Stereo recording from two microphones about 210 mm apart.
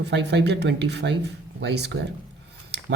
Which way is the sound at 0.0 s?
55° right (ahead or behind).